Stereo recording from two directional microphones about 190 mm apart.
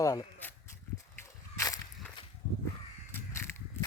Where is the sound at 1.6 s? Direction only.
20° left (ahead or behind).